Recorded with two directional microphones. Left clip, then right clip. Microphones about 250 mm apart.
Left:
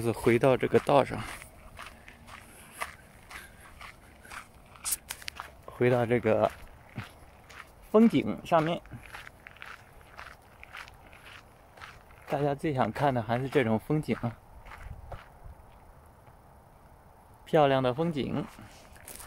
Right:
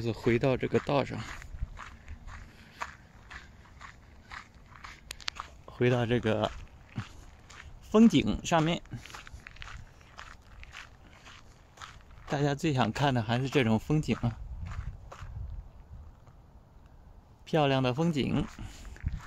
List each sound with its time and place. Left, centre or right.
0.0 s speech: centre
5.7 s speech: centre
7.0 s a sound: centre
10.1 s walk: centre
11.8 s a sound: centre
17.5 s speech: centre